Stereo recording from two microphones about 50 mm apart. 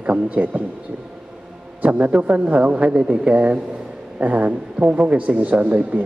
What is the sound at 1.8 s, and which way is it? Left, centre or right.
A man's voice, right.